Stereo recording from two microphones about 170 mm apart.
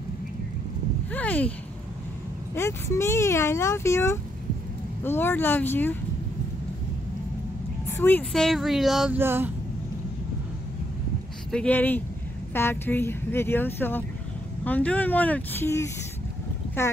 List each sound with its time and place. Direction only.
1.1 s speech: 10° left (ahead or behind)
2.5 s speech: 15° left (ahead or behind)
8.0 s speech: 10° left (ahead or behind)
9.2 s speech: 15° right (ahead or behind)
11.5 s speech: 10° left (ahead or behind)